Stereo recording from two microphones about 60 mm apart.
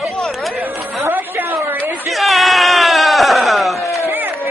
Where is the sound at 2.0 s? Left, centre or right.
Centre.